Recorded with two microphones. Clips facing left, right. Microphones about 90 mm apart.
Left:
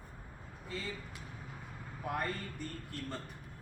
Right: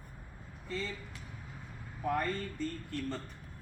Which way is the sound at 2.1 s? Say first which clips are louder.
Right 4 dB; 10° left (ahead or behind).